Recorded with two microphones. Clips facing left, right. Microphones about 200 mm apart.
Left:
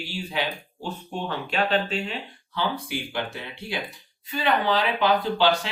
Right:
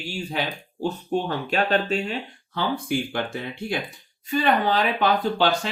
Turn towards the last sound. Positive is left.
turn(degrees=-45)  # may be behind; listen again after turning